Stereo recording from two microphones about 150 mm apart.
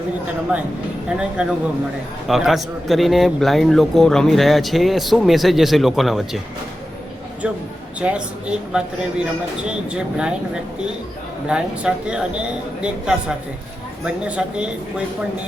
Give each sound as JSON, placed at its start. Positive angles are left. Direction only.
{"t": 0.5, "sound": "a man's voice", "side_deg": -10}
{"t": 7.4, "sound": "a man's voice", "side_deg": -5}